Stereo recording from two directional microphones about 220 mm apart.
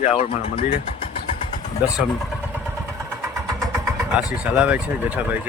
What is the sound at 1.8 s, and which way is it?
Speech, 5° right (ahead or behind).